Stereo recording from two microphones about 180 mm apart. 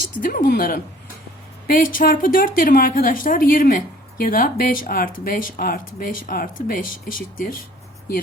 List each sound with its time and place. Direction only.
0.2 s a woman's voice: 50° left (ahead or behind)